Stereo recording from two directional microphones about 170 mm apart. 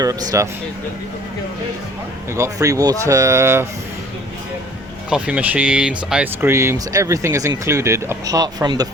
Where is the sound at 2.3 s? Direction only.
15° right (ahead or behind).